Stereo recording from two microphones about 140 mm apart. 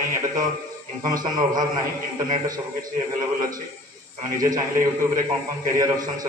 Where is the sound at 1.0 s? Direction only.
30° right (ahead or behind).